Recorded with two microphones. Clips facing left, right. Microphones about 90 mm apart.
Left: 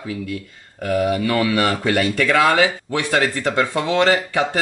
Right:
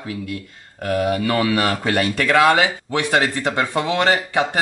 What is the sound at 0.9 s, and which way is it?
Speech, 15° left (ahead or behind).